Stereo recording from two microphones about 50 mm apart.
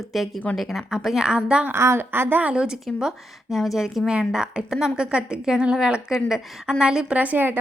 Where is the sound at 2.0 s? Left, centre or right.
Right.